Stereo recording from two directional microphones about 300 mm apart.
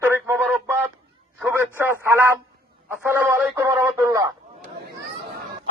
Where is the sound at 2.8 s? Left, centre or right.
Centre.